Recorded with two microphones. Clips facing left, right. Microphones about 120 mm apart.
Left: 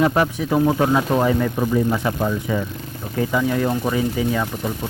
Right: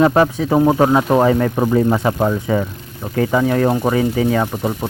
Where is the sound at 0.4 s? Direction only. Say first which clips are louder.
Right 4 dB; 50° right (ahead or behind).